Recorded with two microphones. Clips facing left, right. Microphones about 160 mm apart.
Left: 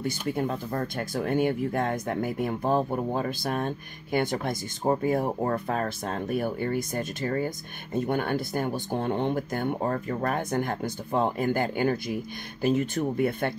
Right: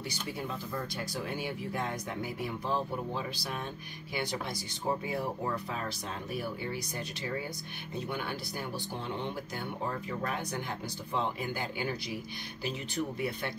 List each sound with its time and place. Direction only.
0.3 s speech: 50° left (ahead or behind)